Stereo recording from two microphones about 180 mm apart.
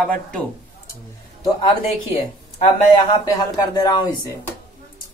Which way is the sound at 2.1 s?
35° left (ahead or behind).